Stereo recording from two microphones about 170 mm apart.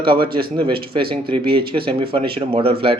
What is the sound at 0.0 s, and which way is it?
Speech, 30° right (ahead or behind).